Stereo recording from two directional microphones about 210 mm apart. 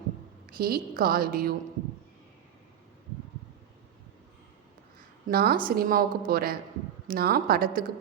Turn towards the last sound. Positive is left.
turn(degrees=-45)  # may be behind; listen again after turning